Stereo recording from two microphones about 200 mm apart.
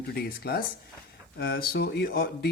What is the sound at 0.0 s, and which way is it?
Speech, 50° left (ahead or behind).